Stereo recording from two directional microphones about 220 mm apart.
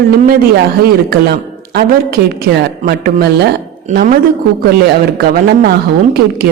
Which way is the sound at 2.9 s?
45° right (ahead or behind).